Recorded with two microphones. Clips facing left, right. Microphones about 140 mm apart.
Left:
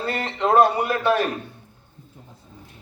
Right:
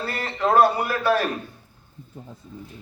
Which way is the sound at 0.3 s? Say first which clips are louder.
Even; 20° left (ahead or behind).